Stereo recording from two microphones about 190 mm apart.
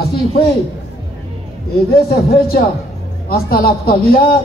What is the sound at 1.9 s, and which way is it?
A man's voice, 50° left (ahead or behind).